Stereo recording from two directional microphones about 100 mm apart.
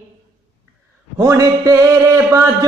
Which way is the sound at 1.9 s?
30° right (ahead or behind).